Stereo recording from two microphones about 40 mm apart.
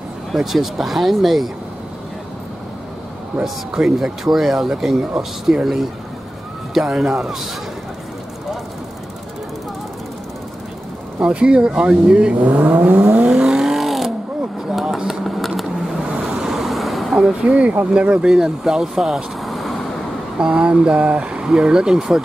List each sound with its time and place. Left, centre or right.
0.4 s speech: centre
3.3 s speech: centre
3.7 s speech: centre
11.1 s speech: right
12.4 s speech: right
13.6 s vehicle: centre
14.8 s a sound: centre
15.9 s vehicle: centre
16.5 s vehicle: centre
17.2 s speech: right
18.3 s speech: centre
20.3 s speech: right